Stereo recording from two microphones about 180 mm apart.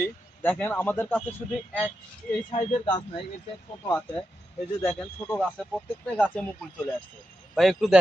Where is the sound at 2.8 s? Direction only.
25° left (ahead or behind).